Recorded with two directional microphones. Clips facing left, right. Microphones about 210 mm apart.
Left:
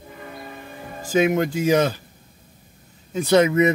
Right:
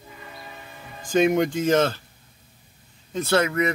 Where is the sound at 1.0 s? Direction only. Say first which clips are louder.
Even; 5° left (ahead or behind).